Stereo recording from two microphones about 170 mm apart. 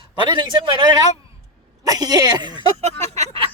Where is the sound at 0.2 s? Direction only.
25° right (ahead or behind).